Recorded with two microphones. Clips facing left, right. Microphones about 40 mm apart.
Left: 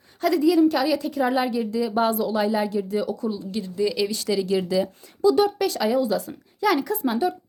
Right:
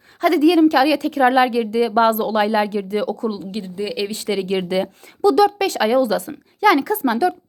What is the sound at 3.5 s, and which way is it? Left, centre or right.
Speech, right.